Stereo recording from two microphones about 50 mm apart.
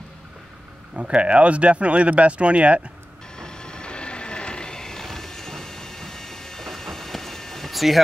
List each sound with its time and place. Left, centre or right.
0.9 s speech: right
3.3 s vehicle: centre